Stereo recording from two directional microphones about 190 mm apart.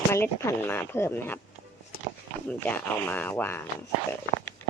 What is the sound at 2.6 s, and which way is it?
Speech, 10° left (ahead or behind).